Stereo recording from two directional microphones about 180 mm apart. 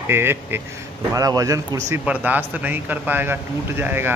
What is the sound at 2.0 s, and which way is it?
Speech, 10° right (ahead or behind).